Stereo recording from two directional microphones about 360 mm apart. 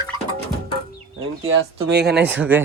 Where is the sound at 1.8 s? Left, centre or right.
Right.